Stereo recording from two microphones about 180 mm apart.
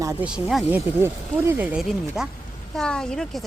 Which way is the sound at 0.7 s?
15° right (ahead or behind).